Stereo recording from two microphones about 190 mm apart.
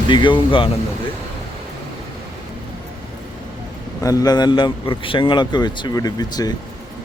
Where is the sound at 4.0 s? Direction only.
20° left (ahead or behind).